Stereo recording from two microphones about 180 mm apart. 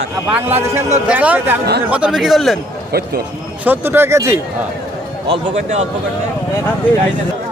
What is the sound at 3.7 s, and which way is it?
Speech, 10° right (ahead or behind).